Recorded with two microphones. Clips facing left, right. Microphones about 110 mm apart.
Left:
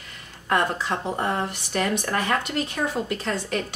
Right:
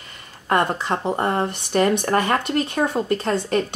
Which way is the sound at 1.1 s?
45° right (ahead or behind).